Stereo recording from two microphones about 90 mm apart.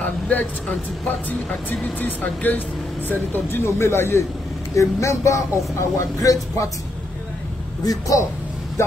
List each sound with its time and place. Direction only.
0.0 s speech: 20° left (ahead or behind); by 6.7 s 40° left (ahead or behind)
7.8 s speech: 40° left (ahead or behind)